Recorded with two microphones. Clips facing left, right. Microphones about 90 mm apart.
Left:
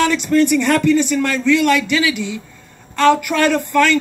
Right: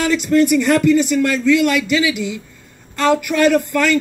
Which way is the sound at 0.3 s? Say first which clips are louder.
Right 2 dB; 15° right (ahead or behind).